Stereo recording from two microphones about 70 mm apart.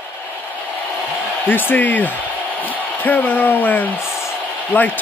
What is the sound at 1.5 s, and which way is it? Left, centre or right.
Speech, left.